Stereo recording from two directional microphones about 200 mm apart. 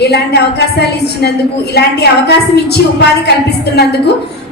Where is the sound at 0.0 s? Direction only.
55° left (ahead or behind).